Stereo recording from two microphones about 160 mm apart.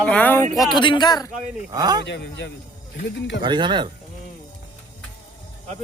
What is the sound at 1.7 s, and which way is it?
Speech, 25° right (ahead or behind).